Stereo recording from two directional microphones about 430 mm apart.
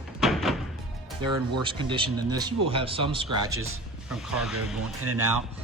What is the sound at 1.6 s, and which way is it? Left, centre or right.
Speech, centre.